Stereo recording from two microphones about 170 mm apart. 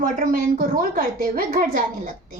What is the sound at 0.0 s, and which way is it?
A woman's voice, 55° right (ahead or behind).